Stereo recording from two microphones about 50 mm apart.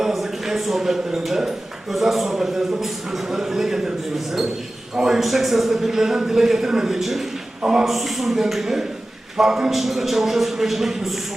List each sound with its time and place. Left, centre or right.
0.0 s speech: centre
7.6 s speech: centre
7.9 s a man's voice: centre